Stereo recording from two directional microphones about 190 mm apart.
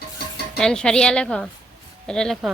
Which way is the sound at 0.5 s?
5° left (ahead or behind).